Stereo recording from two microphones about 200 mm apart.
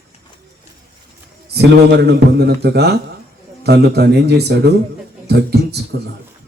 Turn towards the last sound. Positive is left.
turn(degrees=-55)  # may be behind; listen again after turning